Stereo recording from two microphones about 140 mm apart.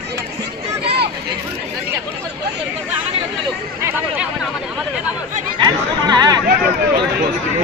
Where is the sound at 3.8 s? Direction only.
10° right (ahead or behind).